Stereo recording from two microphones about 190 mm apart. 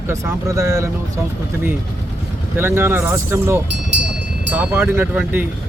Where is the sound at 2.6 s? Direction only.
10° right (ahead or behind).